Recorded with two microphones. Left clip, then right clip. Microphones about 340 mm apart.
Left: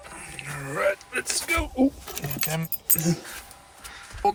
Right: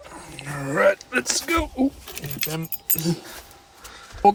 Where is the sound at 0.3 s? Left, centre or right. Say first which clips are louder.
Right 6 dB; centre.